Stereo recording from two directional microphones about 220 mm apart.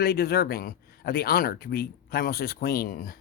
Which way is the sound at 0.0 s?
45° left (ahead or behind).